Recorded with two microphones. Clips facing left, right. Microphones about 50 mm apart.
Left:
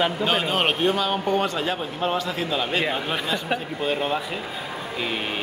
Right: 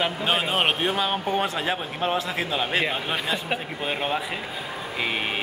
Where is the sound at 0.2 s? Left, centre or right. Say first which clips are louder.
Left 1 dB; centre.